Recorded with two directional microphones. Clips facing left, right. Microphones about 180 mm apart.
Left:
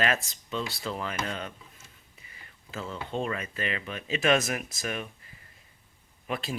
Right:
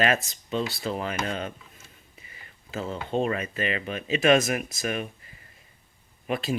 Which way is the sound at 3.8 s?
55° right (ahead or behind).